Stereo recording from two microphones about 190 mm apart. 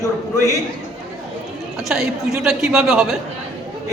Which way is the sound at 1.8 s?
Centre (ahead or behind).